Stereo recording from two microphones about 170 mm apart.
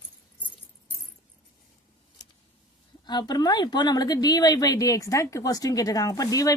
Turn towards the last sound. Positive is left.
turn(degrees=20)  # may be behind; listen again after turning